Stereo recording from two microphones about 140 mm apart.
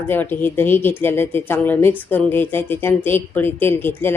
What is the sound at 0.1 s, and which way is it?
A woman's voice, 15° left (ahead or behind).